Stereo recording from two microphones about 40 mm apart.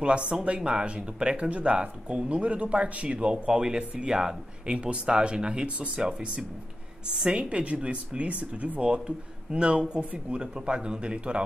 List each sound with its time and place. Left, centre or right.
0.0 s speech: right
3.2 s speech: centre
4.7 s speech: right
7.2 s speech: centre
7.5 s speech: right